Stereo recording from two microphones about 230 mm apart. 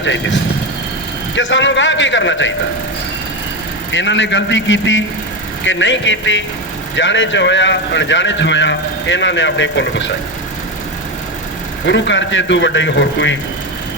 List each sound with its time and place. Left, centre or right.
0.0 s a man's voice: left
1.4 s a man's voice: left
3.9 s a man's voice: left
11.9 s a man's voice: left